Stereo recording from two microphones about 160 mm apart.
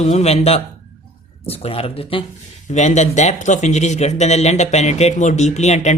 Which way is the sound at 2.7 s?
45° left (ahead or behind).